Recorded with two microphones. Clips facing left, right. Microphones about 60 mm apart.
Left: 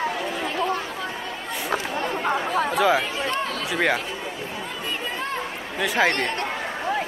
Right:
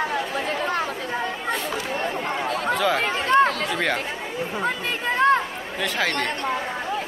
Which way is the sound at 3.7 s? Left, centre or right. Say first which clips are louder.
Left 2 dB; centre.